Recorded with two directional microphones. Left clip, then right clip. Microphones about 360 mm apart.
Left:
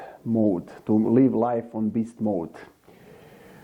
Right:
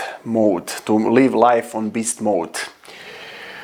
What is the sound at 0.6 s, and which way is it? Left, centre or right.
Speech, centre.